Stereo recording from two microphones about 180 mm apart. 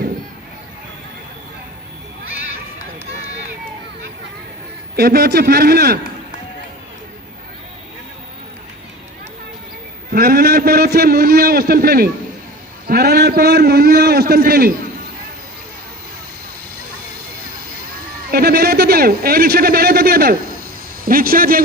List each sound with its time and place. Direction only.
4.9 s a man's voice: 60° right (ahead or behind)
10.1 s a man's voice: 55° right (ahead or behind)
18.3 s a man's voice: 60° right (ahead or behind)